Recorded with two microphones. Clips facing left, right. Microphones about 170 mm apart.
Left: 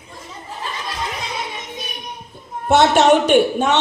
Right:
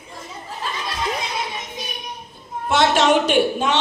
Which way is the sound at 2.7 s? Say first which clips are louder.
Left 4 dB; 55° left (ahead or behind).